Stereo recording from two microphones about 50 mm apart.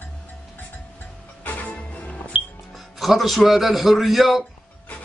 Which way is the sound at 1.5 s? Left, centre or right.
Left.